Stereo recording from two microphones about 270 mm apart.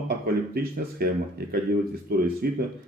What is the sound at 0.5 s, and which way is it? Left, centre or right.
Speech, right.